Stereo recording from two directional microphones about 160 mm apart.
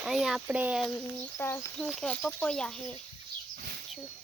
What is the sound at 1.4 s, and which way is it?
Speech, 15° left (ahead or behind).